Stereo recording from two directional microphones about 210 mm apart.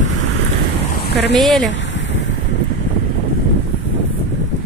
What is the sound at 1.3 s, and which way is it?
Speech, centre (ahead or behind).